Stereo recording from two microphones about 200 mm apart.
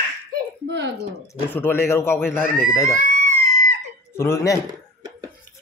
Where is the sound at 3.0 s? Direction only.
40° right (ahead or behind).